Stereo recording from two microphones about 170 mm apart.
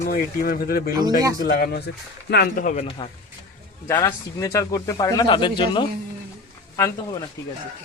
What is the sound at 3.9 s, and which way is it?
Speech, 20° left (ahead or behind).